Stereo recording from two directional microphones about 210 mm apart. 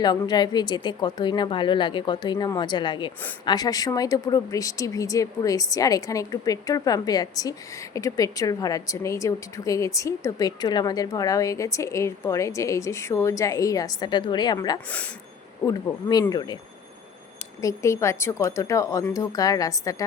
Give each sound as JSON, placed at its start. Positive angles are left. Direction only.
{"t": 0.0, "sound": "a woman's voice", "side_deg": 20}
{"t": 14.8, "sound": "speech", "side_deg": 5}
{"t": 15.6, "sound": "a woman's voice", "side_deg": 15}
{"t": 17.6, "sound": "speech", "side_deg": 15}